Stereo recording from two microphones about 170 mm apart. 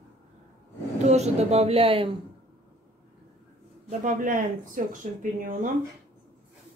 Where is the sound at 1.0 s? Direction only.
40° right (ahead or behind).